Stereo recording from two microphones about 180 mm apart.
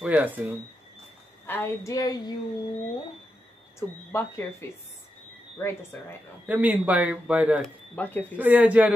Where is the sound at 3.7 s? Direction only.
15° left (ahead or behind).